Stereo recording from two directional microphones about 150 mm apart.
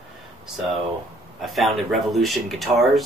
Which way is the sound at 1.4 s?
Centre (ahead or behind).